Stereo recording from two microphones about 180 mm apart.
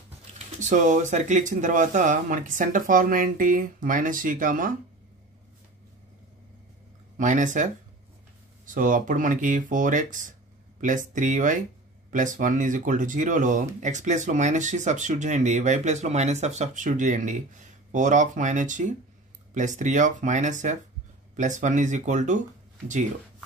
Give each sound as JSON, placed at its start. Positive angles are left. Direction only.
{"t": 0.6, "sound": "speech", "side_deg": -45}
{"t": 7.2, "sound": "speech", "side_deg": -45}
{"t": 8.7, "sound": "speech", "side_deg": -45}